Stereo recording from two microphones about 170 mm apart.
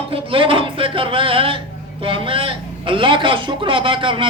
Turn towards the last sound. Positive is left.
turn(degrees=-30)  # may be behind; listen again after turning